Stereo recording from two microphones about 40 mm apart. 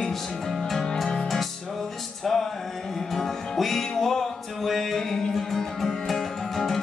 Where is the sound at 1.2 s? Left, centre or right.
Centre.